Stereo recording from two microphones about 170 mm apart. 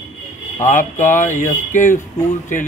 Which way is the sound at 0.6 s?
45° left (ahead or behind).